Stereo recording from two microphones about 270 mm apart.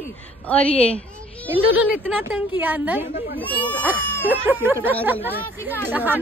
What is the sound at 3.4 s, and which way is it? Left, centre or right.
Speech, centre.